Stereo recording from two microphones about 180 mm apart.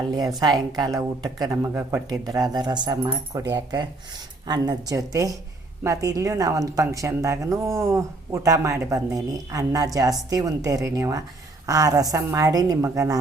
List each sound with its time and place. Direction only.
0.0 s a woman's voice: 20° right (ahead or behind)